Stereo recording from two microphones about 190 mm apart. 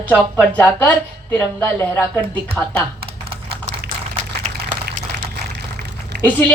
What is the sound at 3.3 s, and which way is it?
Typing, 30° right (ahead or behind).